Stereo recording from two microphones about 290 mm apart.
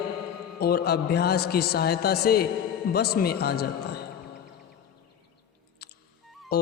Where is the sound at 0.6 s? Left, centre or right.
Left.